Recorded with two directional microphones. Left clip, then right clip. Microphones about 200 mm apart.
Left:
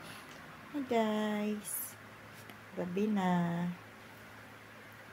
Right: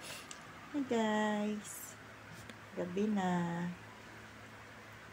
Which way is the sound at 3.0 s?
30° left (ahead or behind).